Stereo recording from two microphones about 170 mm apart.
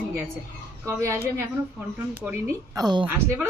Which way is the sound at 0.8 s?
15° right (ahead or behind).